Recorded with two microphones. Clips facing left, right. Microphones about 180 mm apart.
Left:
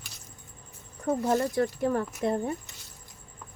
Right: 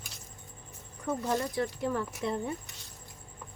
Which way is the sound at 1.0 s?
45° left (ahead or behind).